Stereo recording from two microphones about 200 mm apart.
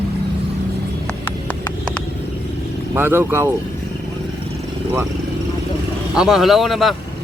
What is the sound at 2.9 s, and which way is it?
Speech, 10° right (ahead or behind).